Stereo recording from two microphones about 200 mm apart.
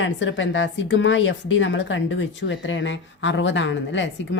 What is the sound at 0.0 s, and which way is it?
A woman's voice, 70° left (ahead or behind).